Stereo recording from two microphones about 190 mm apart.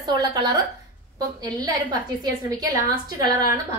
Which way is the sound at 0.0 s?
20° right (ahead or behind).